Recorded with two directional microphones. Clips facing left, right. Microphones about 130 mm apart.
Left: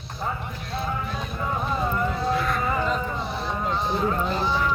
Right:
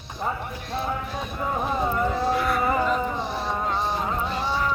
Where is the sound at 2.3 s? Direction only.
10° right (ahead or behind).